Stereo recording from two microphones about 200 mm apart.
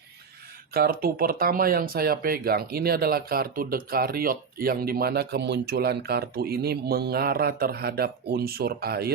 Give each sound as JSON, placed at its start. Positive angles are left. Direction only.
{"t": 0.7, "sound": "speech", "side_deg": -50}